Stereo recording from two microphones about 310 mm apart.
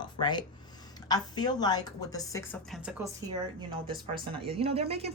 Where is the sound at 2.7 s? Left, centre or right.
Centre.